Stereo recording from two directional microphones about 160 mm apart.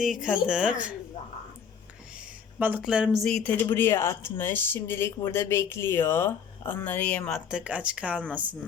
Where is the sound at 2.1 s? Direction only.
5° right (ahead or behind).